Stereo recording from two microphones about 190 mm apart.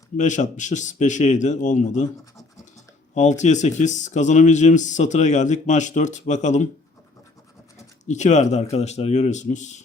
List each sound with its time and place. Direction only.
0.2 s speech: 40° left (ahead or behind)
3.2 s speech: 40° left (ahead or behind)
8.0 s speech: 40° left (ahead or behind)